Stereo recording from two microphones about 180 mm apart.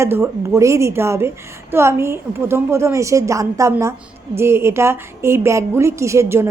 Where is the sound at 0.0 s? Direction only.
15° right (ahead or behind).